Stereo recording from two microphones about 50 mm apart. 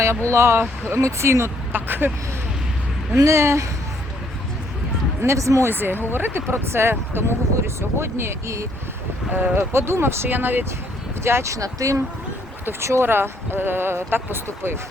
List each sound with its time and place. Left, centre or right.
0.3 s speech: right
0.6 s speech: right
1.0 s speech: right
1.7 s speech: right
3.2 s speech: right
5.2 s speech: right
5.6 s speech: right
9.3 s speech: right
9.7 s speech: right
10.2 s speech: right
11.2 s speech: right
12.8 s speech: right